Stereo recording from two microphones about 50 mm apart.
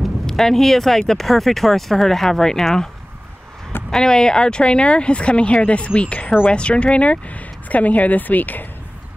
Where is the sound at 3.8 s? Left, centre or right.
Centre.